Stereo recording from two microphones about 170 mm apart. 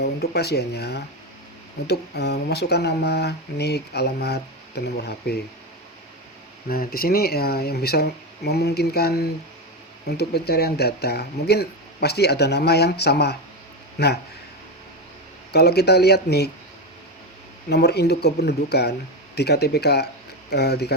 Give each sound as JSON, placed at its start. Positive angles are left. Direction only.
{"t": 0.0, "sound": "speech", "side_deg": 70}
{"t": 6.7, "sound": "speech", "side_deg": 60}
{"t": 15.5, "sound": "speech", "side_deg": 70}
{"t": 17.7, "sound": "speech", "side_deg": 75}